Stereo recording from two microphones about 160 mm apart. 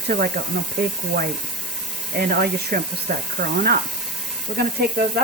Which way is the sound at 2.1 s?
75° right (ahead or behind).